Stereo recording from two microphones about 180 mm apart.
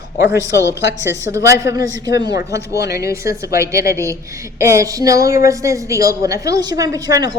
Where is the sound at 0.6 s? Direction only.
15° left (ahead or behind).